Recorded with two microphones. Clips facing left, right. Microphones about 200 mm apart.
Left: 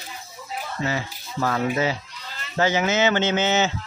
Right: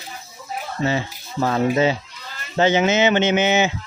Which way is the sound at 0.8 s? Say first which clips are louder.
Right 6 dB; 25° right (ahead or behind).